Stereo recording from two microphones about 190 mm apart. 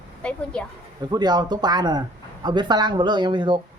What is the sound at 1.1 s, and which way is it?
Speech, 20° right (ahead or behind).